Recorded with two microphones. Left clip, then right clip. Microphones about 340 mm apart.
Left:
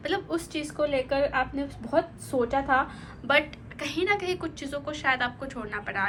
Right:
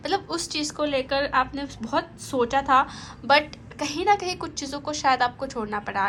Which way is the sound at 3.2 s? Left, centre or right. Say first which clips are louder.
Right 4 dB; centre.